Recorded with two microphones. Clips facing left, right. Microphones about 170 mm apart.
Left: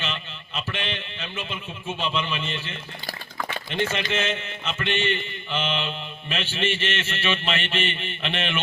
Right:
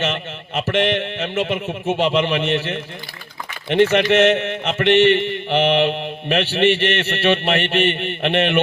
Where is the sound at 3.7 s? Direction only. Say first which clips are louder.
Right 13 dB; 70° right (ahead or behind).